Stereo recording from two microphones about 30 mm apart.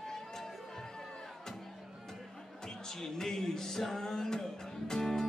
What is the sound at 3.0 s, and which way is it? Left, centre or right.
Music, centre.